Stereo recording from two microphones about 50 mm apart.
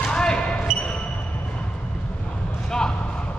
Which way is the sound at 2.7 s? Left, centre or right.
Centre.